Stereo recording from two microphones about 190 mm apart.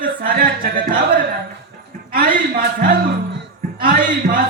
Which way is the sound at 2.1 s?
50° right (ahead or behind).